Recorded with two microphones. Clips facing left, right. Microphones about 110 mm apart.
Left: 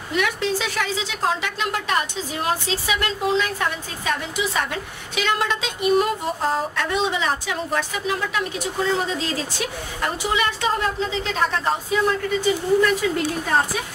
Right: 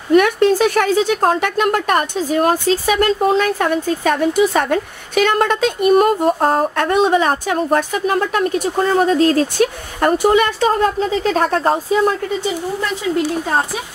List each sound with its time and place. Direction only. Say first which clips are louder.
0.1 s speech: right 11 dB; 50° right (ahead or behind)